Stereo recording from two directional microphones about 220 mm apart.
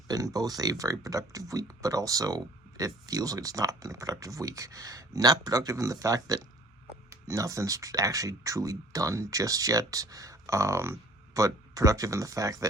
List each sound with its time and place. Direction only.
0.1 s speech: 15° right (ahead or behind)